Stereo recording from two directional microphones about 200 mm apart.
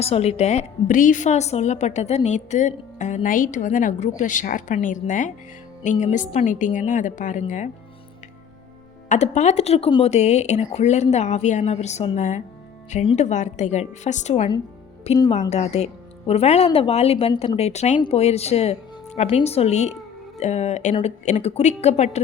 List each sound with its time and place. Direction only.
0.0 s a woman's voice: 30° left (ahead or behind)
9.0 s a woman's voice: 35° left (ahead or behind)